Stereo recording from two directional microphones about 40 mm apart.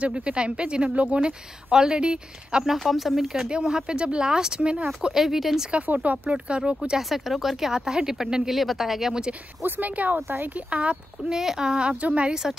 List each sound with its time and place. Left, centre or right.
0.0 s speech: right
1.7 s speech: centre
2.7 s speech: centre
3.3 s speech: centre
5.1 s speech: centre
6.0 s speech: right
7.0 s speech: centre
7.7 s speech: centre
8.5 s speech: centre
9.7 s speech: right
10.7 s speech: right
11.2 s speech: centre
12.0 s speech: right